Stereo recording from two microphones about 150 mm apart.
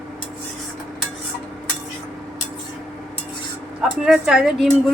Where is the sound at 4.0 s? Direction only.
5° right (ahead or behind).